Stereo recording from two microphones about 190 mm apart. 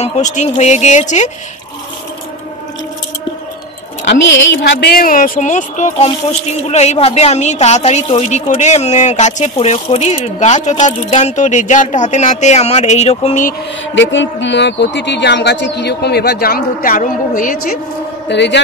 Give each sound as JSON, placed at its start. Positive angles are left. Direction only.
{"t": 0.0, "sound": "a woman's voice", "side_deg": 40}
{"t": 4.6, "sound": "a woman's voice", "side_deg": 65}
{"t": 13.9, "sound": "speech", "side_deg": 75}
{"t": 18.3, "sound": "speech", "side_deg": 65}